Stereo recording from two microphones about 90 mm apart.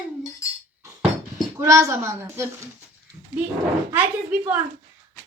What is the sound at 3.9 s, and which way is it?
Speech, 20° right (ahead or behind).